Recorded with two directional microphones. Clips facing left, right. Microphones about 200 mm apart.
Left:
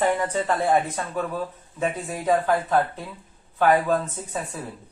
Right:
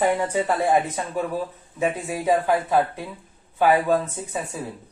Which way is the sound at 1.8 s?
10° right (ahead or behind).